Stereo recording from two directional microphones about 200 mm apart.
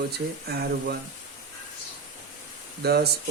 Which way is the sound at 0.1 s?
55° right (ahead or behind).